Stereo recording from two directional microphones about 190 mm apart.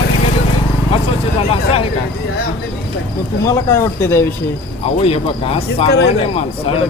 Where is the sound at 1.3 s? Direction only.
30° left (ahead or behind).